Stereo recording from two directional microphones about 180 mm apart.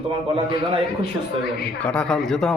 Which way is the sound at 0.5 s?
60° left (ahead or behind).